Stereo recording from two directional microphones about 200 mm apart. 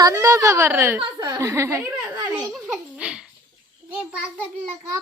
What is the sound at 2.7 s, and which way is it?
Giggle, 5° right (ahead or behind).